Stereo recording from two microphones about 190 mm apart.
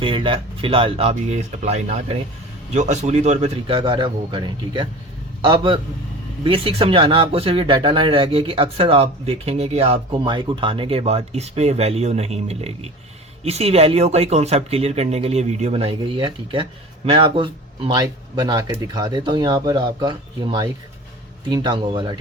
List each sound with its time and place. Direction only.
0.0 s speech: 25° right (ahead or behind)